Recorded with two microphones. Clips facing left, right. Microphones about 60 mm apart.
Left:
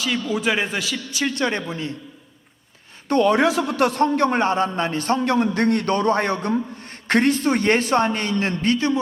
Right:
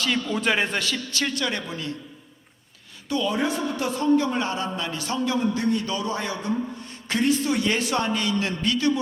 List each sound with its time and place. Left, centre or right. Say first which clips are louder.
0.0 s a man's voice: left 2 dB; centre
1.4 s a man's voice: left 5 dB; left
3.1 s a man's voice: left 7 dB; left
4.4 s a man's voice: left 7 dB; left